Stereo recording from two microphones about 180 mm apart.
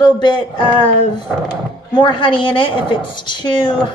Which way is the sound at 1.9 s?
25° left (ahead or behind).